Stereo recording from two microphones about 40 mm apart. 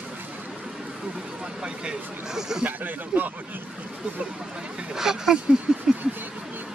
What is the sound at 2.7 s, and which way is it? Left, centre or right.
Speech, right.